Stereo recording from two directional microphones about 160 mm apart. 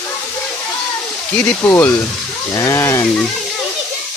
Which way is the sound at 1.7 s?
15° left (ahead or behind).